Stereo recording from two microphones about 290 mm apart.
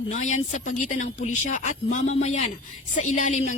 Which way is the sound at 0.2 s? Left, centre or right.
Left.